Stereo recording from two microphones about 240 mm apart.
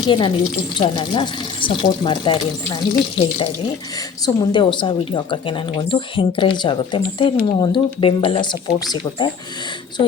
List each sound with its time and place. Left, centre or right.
0.1 s a woman's voice: left